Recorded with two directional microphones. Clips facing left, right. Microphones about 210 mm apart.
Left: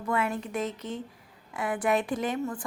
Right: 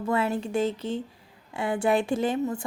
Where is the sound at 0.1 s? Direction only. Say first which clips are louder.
Right 3 dB; 30° right (ahead or behind).